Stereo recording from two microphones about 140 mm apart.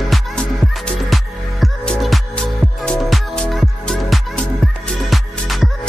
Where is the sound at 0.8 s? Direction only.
Centre (ahead or behind).